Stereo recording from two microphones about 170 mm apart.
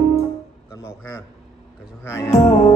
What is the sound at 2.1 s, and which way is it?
Music, 15° left (ahead or behind).